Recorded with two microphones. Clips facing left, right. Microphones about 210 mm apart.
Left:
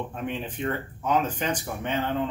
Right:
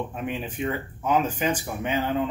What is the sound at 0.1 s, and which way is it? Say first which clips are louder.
Speech: right 1 dB; 5° right (ahead or behind).